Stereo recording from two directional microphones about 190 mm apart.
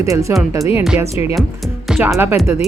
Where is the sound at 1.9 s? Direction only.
5° right (ahead or behind).